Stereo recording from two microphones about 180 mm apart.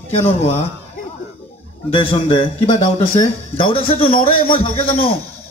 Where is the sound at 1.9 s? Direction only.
30° left (ahead or behind).